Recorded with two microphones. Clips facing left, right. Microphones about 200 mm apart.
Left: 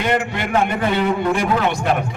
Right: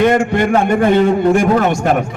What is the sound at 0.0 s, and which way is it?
A man's voice, 45° right (ahead or behind).